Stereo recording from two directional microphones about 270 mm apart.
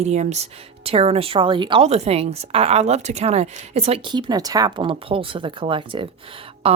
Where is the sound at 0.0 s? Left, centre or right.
Right.